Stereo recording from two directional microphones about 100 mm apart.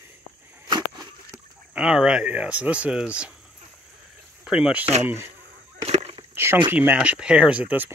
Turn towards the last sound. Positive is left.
turn(degrees=-15)  # may be behind; listen again after turning